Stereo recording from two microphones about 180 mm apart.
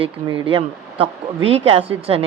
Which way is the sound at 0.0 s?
30° right (ahead or behind).